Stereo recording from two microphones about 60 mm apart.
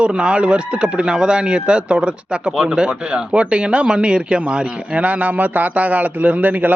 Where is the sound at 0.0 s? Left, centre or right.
Centre.